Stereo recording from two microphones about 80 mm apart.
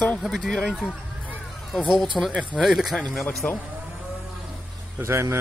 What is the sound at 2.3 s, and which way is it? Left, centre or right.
Speech, centre.